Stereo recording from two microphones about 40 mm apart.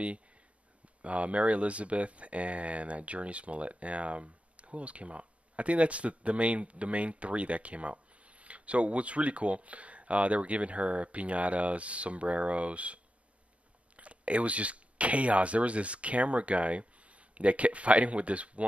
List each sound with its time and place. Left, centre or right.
1.0 s speech: right